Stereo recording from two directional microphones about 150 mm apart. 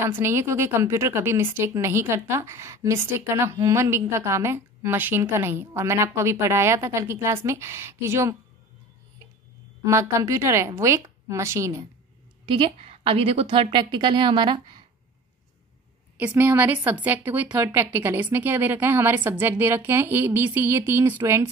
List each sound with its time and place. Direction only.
0.0 s a woman's voice: 15° right (ahead or behind)
9.8 s a woman's voice: 20° right (ahead or behind)
12.4 s a woman's voice: 35° right (ahead or behind)
16.2 s a woman's voice: 10° right (ahead or behind)